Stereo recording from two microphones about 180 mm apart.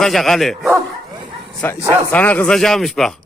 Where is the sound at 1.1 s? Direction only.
25° right (ahead or behind).